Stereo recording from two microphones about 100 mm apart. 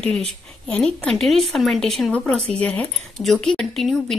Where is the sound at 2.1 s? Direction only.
15° left (ahead or behind).